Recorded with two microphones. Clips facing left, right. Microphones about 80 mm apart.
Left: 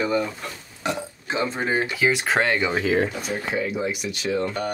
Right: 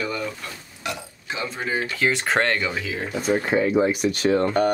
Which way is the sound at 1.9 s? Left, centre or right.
Centre.